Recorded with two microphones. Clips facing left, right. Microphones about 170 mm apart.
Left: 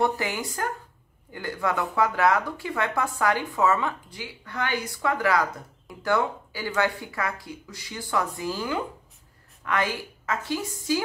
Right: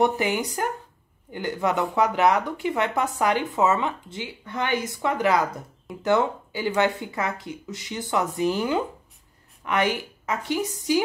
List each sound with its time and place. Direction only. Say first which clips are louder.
0.0 s a woman's voice: right 4 dB; 20° right (ahead or behind)